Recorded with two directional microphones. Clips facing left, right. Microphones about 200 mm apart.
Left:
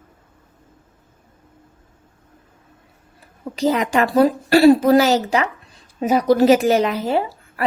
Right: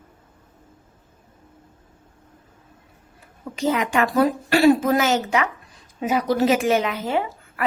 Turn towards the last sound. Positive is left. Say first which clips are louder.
# left 3 dB
turn(degrees=35)  # may be behind; listen again after turning